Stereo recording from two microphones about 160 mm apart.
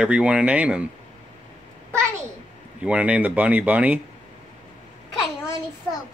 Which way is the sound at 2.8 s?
10° right (ahead or behind).